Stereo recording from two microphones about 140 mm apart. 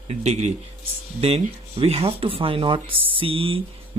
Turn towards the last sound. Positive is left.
turn(degrees=-45)  # may be behind; listen again after turning